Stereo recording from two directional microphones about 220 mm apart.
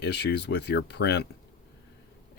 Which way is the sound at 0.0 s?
50° left (ahead or behind).